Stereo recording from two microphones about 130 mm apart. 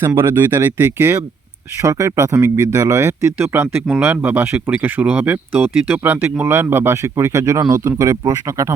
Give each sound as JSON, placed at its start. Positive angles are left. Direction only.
{"t": 0.0, "sound": "speech", "side_deg": -20}